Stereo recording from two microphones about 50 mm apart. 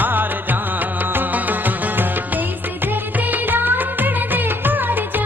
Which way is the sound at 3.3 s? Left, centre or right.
Right.